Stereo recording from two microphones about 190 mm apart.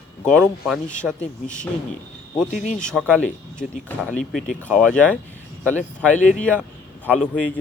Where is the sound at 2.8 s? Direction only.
5° left (ahead or behind).